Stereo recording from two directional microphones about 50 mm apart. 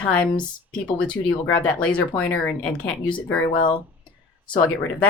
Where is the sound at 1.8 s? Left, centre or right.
Left.